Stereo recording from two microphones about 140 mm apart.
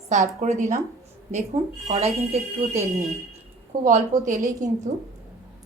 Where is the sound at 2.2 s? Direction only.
45° right (ahead or behind).